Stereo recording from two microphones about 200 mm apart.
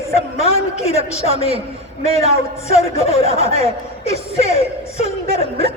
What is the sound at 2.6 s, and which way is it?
Speech, 30° left (ahead or behind).